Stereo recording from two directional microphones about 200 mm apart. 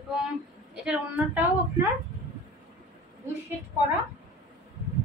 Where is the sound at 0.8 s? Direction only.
5° right (ahead or behind).